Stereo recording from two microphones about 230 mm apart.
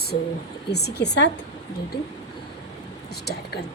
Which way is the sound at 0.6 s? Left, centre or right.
Left.